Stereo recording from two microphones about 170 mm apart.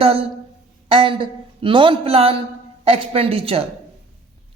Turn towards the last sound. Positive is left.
turn(degrees=-35)  # may be behind; listen again after turning